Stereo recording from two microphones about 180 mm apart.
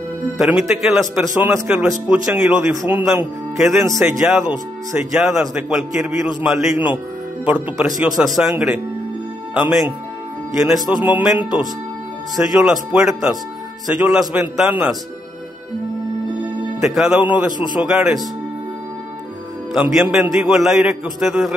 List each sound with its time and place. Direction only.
0.4 s speech: 5° right (ahead or behind)
1.2 s speech: 15° right (ahead or behind)
1.7 s speech: 5° right (ahead or behind)
2.6 s speech: 15° right (ahead or behind)
3.5 s speech: centre (ahead or behind)
4.0 s speech: 15° right (ahead or behind)
5.1 s speech: centre (ahead or behind)
12.5 s speech: 5° right (ahead or behind)
16.8 s speech: 5° right (ahead or behind)
19.7 s speech: 5° right (ahead or behind)